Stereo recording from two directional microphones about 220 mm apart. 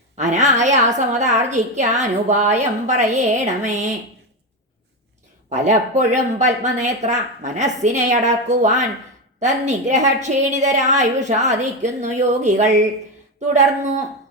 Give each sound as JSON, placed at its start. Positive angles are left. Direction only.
{"t": 0.2, "sound": "a woman's voice", "side_deg": -30}
{"t": 5.5, "sound": "a woman's voice", "side_deg": -30}